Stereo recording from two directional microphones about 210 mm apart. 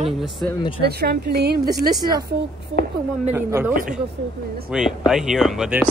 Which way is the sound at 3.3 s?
10° right (ahead or behind).